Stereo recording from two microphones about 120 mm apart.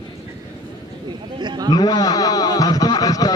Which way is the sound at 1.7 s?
35° left (ahead or behind).